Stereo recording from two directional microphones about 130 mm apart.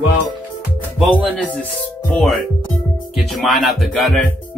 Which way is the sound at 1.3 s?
10° left (ahead or behind).